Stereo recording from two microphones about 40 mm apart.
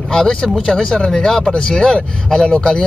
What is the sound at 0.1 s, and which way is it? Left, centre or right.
Speech, centre.